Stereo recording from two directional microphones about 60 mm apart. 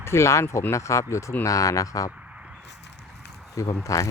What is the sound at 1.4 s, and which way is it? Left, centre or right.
Speech, left.